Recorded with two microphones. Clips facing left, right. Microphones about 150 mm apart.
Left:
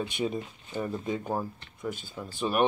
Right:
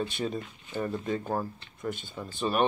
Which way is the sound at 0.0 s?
10° left (ahead or behind).